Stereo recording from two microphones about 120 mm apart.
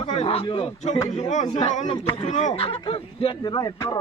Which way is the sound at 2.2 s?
90° left.